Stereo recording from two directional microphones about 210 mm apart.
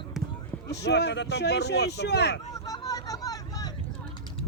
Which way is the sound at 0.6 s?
50° left (ahead or behind).